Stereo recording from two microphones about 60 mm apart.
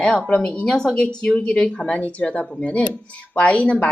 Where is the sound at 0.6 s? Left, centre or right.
Centre.